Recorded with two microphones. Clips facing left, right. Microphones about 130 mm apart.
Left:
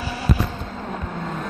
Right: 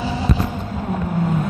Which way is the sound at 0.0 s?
20° right (ahead or behind).